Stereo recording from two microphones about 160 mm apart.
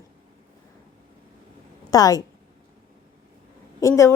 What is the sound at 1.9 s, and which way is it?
Speech, 20° left (ahead or behind).